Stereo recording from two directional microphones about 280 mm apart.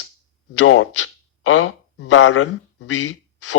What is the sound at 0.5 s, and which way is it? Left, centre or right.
Speech, left.